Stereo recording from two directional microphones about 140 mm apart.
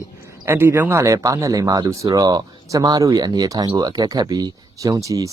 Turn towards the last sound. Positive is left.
turn(degrees=-25)  # may be behind; listen again after turning